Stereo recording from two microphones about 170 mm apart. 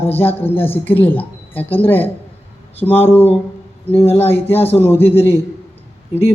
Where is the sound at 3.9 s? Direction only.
35° left (ahead or behind).